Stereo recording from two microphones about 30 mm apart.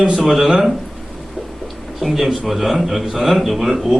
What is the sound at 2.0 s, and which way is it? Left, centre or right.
A man's voice, centre.